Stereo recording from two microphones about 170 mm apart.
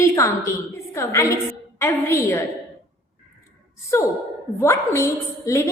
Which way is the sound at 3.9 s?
15° left (ahead or behind).